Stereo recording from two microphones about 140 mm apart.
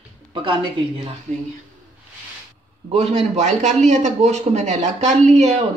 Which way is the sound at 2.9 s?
50° right (ahead or behind).